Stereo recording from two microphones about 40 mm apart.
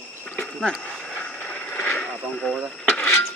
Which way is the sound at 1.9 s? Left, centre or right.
Left.